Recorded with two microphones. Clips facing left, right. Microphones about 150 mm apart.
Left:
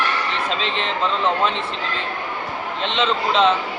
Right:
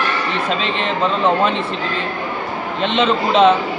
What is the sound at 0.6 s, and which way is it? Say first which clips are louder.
Speech: right 4 dB; 55° right (ahead or behind).